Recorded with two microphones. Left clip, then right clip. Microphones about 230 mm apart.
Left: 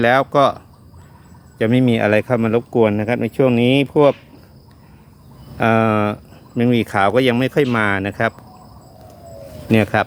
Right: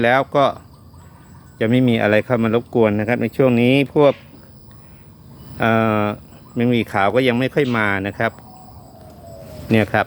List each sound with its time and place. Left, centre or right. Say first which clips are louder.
0.0 s speech: left 2 dB; centre
5.5 s speech: left 1 dB; centre
9.6 s speech: left 1 dB; centre